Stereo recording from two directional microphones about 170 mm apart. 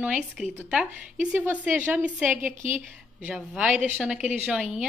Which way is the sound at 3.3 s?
5° right (ahead or behind).